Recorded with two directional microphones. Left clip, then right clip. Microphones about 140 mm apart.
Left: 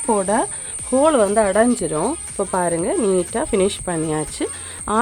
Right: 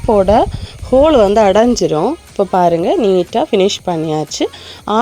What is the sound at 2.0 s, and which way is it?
Speech, 20° right (ahead or behind).